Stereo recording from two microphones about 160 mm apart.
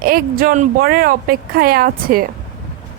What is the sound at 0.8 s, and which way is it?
A woman's voice, 65° right (ahead or behind).